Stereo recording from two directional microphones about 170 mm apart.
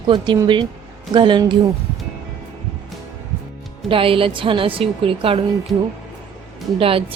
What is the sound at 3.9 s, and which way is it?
A woman's voice, 30° right (ahead or behind).